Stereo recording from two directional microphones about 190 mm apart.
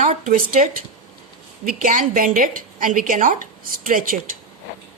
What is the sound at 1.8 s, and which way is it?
A woman's voice, 45° right (ahead or behind).